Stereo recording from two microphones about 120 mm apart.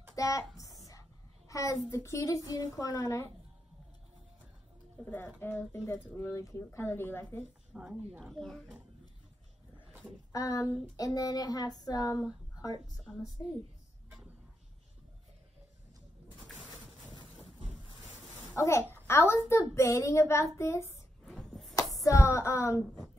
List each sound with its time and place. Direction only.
0.1 s a woman's voice: 30° left (ahead or behind)
1.5 s a child's voice: 25° left (ahead or behind)
5.0 s a child's voice: 15° left (ahead or behind)
7.7 s speech: 10° right (ahead or behind)
8.3 s a child's voice: 5° left (ahead or behind)
10.3 s a sound: 30° left (ahead or behind)
13.1 s a child's voice: 5° left (ahead or behind)
18.6 s a child's voice: 25° left (ahead or behind)
21.3 s chopping: centre (ahead or behind)
22.0 s a child's voice: 25° left (ahead or behind)